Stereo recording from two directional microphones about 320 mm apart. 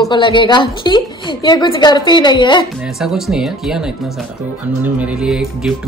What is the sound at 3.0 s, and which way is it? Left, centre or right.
Speech, centre.